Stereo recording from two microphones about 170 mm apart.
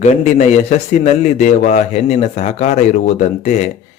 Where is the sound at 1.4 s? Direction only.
45° left (ahead or behind).